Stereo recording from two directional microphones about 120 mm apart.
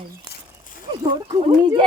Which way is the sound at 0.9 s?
30° right (ahead or behind).